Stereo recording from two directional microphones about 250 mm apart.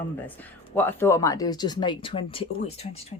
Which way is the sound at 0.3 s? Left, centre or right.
Centre.